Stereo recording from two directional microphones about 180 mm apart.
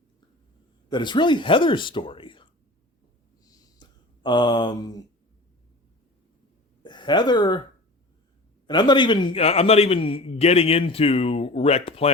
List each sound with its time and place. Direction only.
0.9 s speech: 25° left (ahead or behind)
3.4 s a sound: 20° left (ahead or behind)
6.8 s a woman's voice: 25° left (ahead or behind)
8.6 s a man's voice: 25° left (ahead or behind)